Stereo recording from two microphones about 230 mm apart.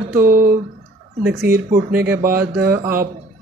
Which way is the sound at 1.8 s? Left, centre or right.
Centre.